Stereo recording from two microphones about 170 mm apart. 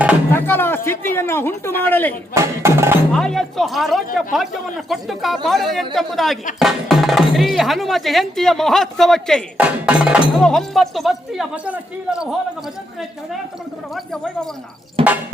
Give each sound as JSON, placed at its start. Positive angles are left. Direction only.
{"t": 0.3, "sound": "a woman's voice", "side_deg": 10}
{"t": 2.3, "sound": "speech", "side_deg": -15}
{"t": 3.1, "sound": "speech", "side_deg": 5}
{"t": 15.0, "sound": "a sound", "side_deg": -35}